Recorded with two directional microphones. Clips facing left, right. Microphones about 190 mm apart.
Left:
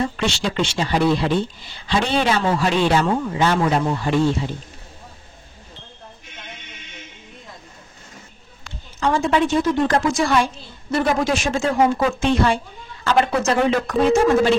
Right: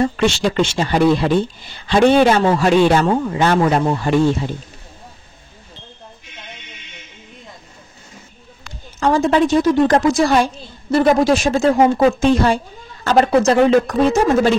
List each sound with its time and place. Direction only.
0.2 s a man's voice: 45° right (ahead or behind)
9.0 s a woman's voice: 40° right (ahead or behind)